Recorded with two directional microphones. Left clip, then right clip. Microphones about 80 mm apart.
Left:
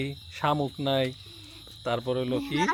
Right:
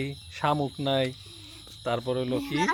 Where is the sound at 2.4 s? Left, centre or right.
Centre.